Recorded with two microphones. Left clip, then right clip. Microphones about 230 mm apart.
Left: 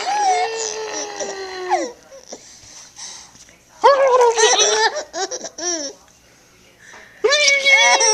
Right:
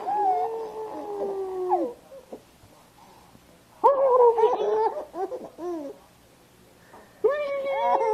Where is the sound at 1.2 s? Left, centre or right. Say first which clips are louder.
Left 2 dB; left.